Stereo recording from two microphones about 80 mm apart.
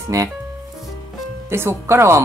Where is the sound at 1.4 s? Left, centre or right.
Right.